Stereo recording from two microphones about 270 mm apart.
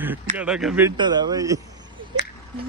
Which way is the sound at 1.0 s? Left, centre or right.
Centre.